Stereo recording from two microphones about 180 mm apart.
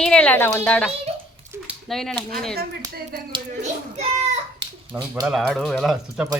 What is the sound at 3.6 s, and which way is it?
Speech, 40° right (ahead or behind).